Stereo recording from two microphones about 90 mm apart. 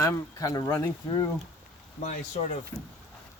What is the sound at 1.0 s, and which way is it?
Speech, 60° left (ahead or behind).